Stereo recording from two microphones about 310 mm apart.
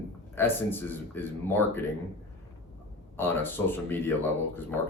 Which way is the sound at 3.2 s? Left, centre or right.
Centre.